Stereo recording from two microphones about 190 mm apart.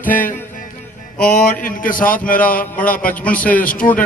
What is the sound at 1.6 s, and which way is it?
Speech, 45° left (ahead or behind).